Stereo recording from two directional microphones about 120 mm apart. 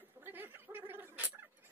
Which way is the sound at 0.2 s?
20° right (ahead or behind).